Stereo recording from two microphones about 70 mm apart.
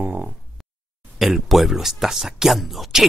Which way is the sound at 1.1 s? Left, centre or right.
Centre.